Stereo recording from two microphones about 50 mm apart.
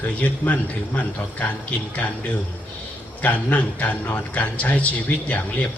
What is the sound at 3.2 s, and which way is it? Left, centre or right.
Speech, left.